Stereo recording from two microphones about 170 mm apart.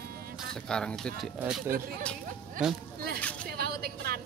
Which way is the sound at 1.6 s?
55° right (ahead or behind).